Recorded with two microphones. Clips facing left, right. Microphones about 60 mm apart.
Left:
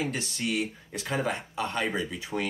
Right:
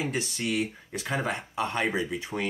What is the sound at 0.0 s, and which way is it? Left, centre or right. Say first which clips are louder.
Speech: right 1 dB; centre.